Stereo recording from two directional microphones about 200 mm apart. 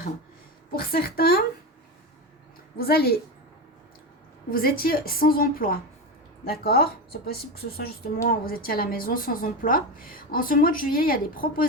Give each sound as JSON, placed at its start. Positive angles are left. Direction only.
{"t": 0.8, "sound": "speech", "side_deg": 50}
{"t": 2.7, "sound": "speech", "side_deg": 50}
{"t": 4.5, "sound": "speech", "side_deg": 45}